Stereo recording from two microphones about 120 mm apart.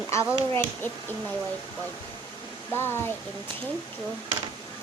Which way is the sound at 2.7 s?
20° left (ahead or behind).